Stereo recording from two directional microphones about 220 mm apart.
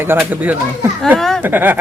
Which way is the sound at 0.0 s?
10° right (ahead or behind).